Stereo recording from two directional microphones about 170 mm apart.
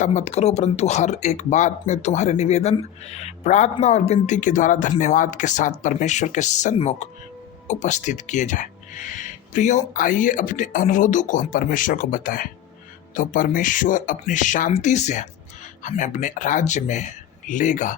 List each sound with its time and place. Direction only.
0.0 s speech: 45° left (ahead or behind)